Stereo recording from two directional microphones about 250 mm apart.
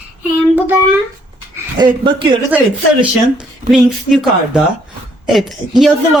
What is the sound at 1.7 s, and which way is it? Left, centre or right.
Speech, centre.